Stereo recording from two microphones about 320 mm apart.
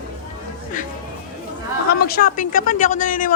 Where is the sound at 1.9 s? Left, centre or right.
Left.